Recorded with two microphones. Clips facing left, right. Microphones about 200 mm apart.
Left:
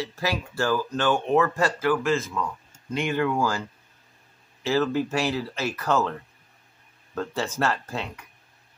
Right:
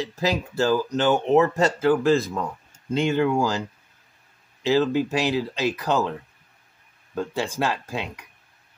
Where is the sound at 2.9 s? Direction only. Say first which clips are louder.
Right 4 dB; 25° right (ahead or behind).